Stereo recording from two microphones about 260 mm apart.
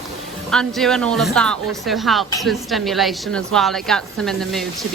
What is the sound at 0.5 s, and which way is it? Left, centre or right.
Speech, centre.